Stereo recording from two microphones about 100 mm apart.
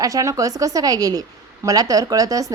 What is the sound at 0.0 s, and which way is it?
A woman's voice, 35° right (ahead or behind).